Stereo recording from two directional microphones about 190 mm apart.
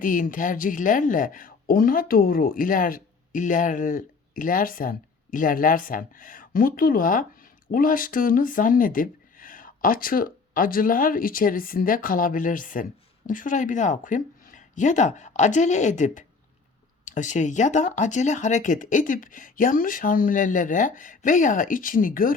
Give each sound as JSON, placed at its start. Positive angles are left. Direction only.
{"t": 0.0, "sound": "speech", "side_deg": 45}